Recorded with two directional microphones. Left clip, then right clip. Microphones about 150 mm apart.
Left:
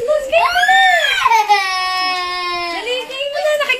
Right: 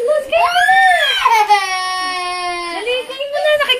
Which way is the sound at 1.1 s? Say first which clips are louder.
Right 1 dB; 10° right (ahead or behind).